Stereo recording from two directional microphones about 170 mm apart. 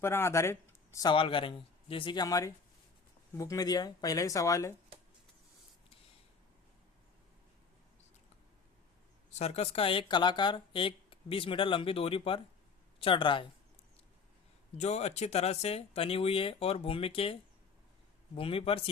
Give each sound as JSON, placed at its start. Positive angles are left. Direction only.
{"t": 0.0, "sound": "speech", "side_deg": 15}
{"t": 9.3, "sound": "speech", "side_deg": 40}
{"t": 14.8, "sound": "speech", "side_deg": 40}
{"t": 18.3, "sound": "speech", "side_deg": 35}